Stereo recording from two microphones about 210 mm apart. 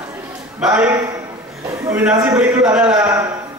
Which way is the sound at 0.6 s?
5° right (ahead or behind).